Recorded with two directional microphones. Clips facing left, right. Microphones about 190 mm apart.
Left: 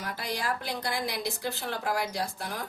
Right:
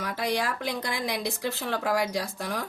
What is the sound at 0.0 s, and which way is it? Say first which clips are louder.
A woman's voice: right 5 dB; 90° right.